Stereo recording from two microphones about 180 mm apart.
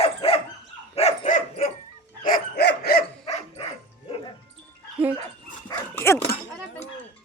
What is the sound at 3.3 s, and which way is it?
Dog, 35° left (ahead or behind).